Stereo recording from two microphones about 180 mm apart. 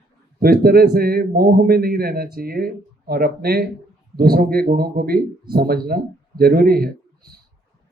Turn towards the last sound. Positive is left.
turn(degrees=-55)  # may be behind; listen again after turning